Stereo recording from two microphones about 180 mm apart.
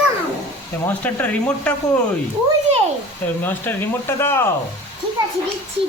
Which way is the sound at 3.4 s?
10° left (ahead or behind).